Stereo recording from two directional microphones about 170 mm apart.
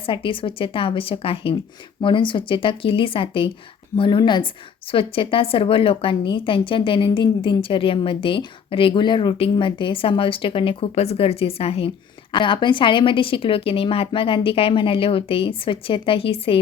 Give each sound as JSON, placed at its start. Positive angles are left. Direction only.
{"t": 0.0, "sound": "a woman's voice", "side_deg": 30}